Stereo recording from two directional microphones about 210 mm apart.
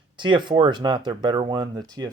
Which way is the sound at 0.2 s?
20° right (ahead or behind).